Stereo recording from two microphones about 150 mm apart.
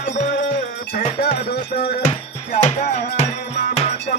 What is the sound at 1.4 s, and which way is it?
Music, 90° left.